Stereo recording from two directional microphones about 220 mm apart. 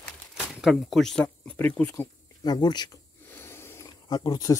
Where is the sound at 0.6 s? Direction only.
Centre (ahead or behind); by 4.5 s 15° left (ahead or behind).